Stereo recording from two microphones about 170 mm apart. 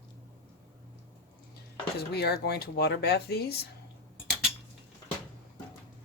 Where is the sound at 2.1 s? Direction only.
70° left (ahead or behind).